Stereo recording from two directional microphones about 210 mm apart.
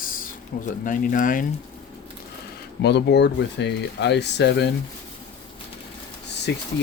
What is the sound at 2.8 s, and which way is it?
Speech, 55° left (ahead or behind).